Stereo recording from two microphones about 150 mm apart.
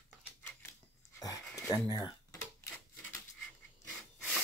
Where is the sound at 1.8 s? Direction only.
25° left (ahead or behind).